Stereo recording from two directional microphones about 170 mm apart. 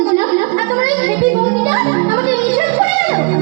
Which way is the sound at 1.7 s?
35° right (ahead or behind).